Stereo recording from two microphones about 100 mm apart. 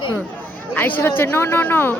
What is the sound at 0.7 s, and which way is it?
A woman's voice, 15° left (ahead or behind).